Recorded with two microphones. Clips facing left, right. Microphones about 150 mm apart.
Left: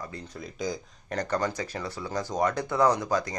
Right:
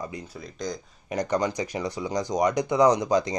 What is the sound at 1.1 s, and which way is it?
Speech, 15° right (ahead or behind).